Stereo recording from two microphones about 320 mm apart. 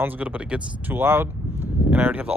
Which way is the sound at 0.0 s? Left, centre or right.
Centre.